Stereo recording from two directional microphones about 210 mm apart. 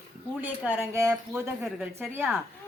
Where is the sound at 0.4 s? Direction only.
10° right (ahead or behind).